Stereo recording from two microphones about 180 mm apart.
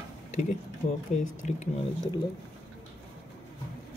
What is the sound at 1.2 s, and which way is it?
Speech, 45° left (ahead or behind).